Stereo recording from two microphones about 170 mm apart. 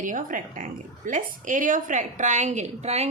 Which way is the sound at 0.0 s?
50° right (ahead or behind).